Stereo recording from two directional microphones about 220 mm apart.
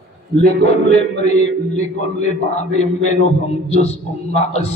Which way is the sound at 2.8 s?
30° left (ahead or behind).